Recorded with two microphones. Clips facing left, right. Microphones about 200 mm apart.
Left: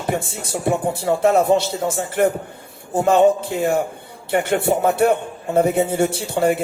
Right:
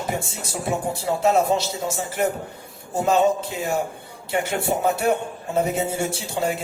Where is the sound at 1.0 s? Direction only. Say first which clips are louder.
Left 4 dB; 55° left (ahead or behind).